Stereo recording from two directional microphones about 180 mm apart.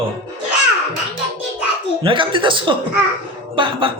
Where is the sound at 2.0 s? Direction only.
30° right (ahead or behind).